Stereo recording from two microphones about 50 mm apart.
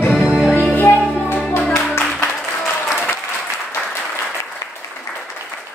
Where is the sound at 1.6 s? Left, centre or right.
Centre.